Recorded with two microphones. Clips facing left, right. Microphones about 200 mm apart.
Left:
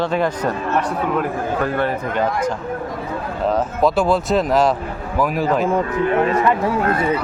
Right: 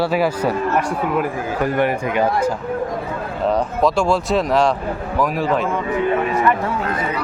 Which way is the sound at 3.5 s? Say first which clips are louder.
Even; 5° left (ahead or behind).